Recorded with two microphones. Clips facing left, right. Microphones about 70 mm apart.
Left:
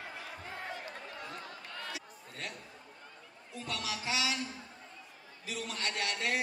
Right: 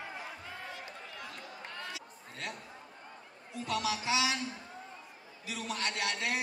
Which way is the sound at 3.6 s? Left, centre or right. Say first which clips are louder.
Right 5 dB; right.